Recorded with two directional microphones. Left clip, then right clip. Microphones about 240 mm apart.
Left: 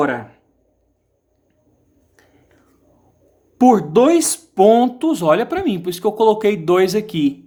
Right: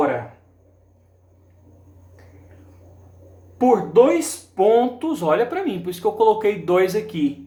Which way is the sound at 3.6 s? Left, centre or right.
Left.